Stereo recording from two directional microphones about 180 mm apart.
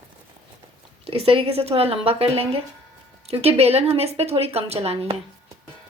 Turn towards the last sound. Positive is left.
turn(degrees=-35)  # may be behind; listen again after turning